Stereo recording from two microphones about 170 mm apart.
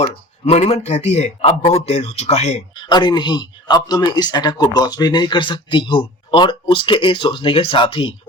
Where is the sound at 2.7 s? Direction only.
25° left (ahead or behind).